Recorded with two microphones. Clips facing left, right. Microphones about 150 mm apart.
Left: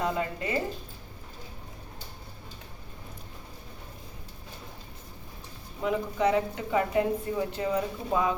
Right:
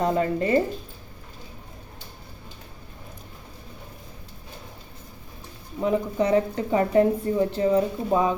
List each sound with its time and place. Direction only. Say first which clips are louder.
0.0 s a woman's voice: right 7 dB; 45° right (ahead or behind)
5.8 s a woman's voice: right 3 dB; 35° right (ahead or behind)